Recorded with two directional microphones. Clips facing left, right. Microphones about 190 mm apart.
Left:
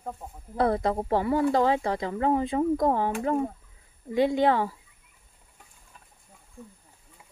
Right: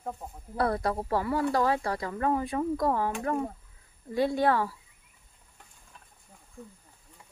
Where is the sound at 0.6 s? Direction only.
20° left (ahead or behind).